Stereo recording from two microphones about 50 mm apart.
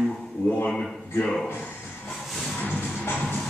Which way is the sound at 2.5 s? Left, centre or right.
Left.